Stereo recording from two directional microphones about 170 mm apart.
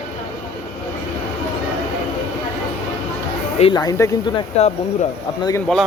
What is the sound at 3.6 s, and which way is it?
Speech, 25° left (ahead or behind).